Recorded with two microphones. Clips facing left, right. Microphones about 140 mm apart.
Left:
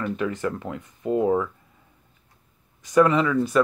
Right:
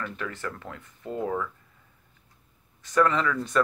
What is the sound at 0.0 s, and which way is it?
Speech, 15° left (ahead or behind).